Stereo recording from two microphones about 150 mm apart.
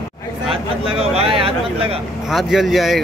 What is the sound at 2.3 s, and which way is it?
Speech, centre (ahead or behind).